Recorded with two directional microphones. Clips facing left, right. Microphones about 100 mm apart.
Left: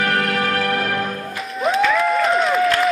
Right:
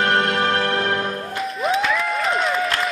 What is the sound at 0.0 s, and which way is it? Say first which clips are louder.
Music: right 1 dB; 25° right (ahead or behind).